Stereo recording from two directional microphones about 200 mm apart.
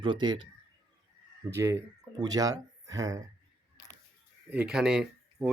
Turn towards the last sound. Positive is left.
turn(degrees=-5)  # may be behind; listen again after turning